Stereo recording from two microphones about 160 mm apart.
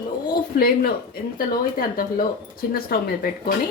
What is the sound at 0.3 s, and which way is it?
Speech, 70° left (ahead or behind).